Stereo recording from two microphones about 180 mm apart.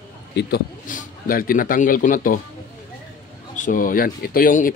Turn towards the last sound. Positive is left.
turn(degrees=50)  # may be behind; listen again after turning